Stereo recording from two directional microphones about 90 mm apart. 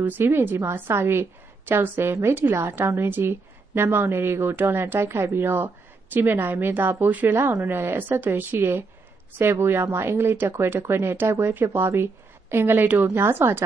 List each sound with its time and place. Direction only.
0.0 s speech: 25° right (ahead or behind)